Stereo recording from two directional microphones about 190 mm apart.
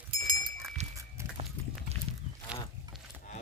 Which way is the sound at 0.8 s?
35° right (ahead or behind).